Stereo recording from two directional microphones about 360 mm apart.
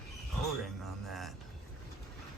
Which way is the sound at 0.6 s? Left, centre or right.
Centre.